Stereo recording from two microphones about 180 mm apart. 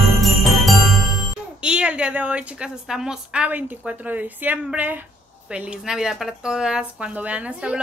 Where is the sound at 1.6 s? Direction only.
5° right (ahead or behind).